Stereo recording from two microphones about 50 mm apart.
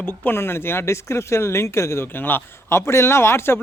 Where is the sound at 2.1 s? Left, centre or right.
Left.